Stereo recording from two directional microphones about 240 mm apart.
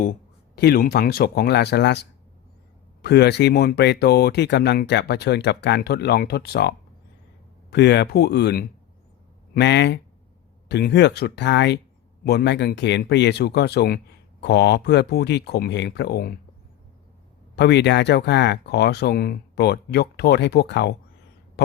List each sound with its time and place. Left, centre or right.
0.5 s speech: left
17.5 s speech: left